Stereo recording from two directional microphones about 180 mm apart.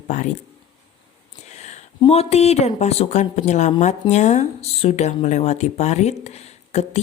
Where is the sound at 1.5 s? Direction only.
40° left (ahead or behind).